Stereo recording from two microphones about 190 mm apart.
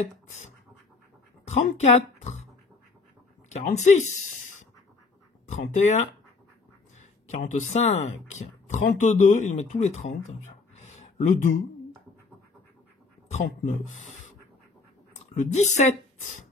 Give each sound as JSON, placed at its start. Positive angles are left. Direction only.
{"t": 1.4, "sound": "speech", "side_deg": 35}
{"t": 3.4, "sound": "speech", "side_deg": 35}
{"t": 5.5, "sound": "speech", "side_deg": 40}
{"t": 7.2, "sound": "speech", "side_deg": 40}
{"t": 10.4, "sound": "a sound", "side_deg": 40}
{"t": 13.7, "sound": "speech", "side_deg": 40}
{"t": 15.3, "sound": "speech", "side_deg": 40}